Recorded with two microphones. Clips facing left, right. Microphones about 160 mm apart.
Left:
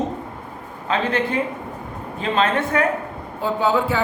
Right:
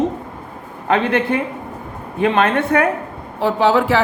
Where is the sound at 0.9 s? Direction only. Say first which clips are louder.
Right 5 dB; 65° right (ahead or behind).